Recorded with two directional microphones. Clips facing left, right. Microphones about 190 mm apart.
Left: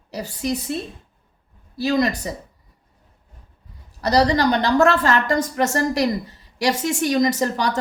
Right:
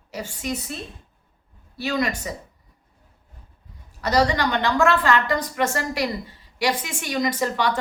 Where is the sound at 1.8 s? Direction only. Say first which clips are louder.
Left 5 dB; 35° left (ahead or behind).